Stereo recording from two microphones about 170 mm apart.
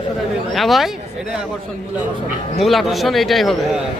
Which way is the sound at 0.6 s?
Centre (ahead or behind).